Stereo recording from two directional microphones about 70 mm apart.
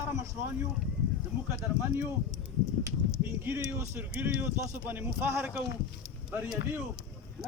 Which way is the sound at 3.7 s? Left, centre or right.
Right.